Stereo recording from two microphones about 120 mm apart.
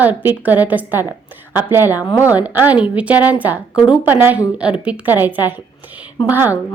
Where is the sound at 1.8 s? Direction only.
35° left (ahead or behind).